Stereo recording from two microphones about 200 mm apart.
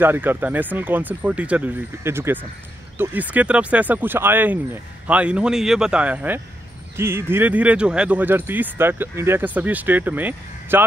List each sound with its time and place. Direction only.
0.0 s speech: 10° right (ahead or behind)